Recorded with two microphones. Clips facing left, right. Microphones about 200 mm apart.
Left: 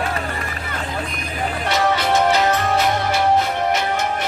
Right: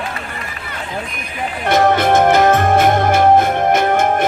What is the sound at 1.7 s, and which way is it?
Music, 50° right (ahead or behind).